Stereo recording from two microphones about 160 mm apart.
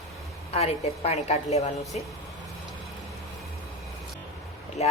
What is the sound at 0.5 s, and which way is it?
A woman's voice, 40° left (ahead or behind).